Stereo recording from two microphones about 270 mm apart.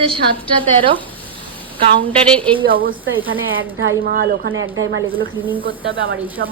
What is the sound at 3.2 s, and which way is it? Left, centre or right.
A woman's voice, right.